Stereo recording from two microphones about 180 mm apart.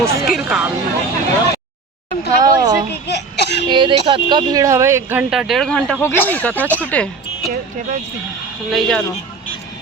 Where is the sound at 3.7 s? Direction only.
25° right (ahead or behind); by 7.1 s 10° left (ahead or behind).